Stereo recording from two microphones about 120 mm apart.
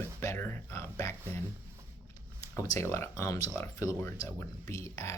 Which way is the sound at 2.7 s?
25° left (ahead or behind).